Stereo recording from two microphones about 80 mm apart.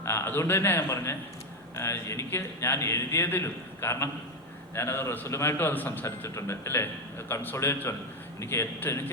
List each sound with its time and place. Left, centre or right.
0.0 s a man's voice: left
6.2 s a man's voice: left